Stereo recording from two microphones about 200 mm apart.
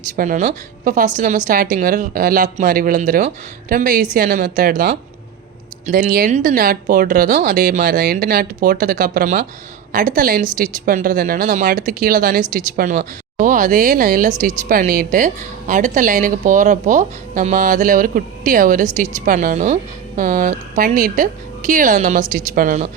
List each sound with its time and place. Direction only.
0.2 s speech: 40° right (ahead or behind)